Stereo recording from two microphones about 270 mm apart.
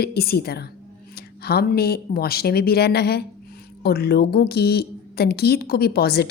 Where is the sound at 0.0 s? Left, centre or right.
Left.